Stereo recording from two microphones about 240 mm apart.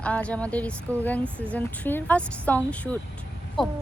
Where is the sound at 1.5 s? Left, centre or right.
Centre.